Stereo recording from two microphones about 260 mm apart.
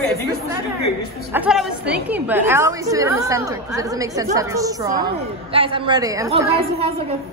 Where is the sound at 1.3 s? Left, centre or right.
Centre.